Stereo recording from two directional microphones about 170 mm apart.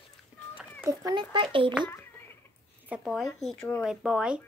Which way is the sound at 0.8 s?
20° right (ahead or behind).